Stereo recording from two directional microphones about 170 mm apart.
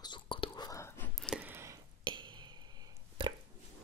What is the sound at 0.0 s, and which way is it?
Whispering, 30° left (ahead or behind).